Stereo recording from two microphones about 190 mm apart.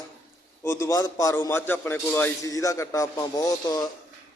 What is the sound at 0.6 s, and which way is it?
A man's voice, 15° left (ahead or behind).